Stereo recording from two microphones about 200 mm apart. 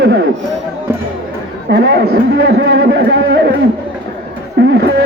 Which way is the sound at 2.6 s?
55° right (ahead or behind).